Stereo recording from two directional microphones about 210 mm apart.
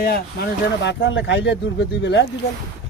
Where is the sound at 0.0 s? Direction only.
45° left (ahead or behind).